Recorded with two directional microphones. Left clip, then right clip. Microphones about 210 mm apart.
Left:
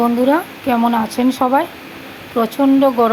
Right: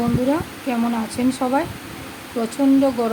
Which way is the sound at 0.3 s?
20° left (ahead or behind).